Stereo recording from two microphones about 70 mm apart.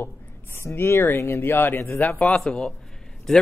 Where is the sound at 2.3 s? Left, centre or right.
Centre.